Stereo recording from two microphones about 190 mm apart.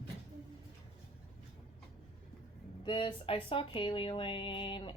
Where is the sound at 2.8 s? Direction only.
25° left (ahead or behind).